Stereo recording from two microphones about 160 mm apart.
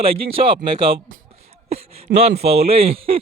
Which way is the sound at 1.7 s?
40° right (ahead or behind).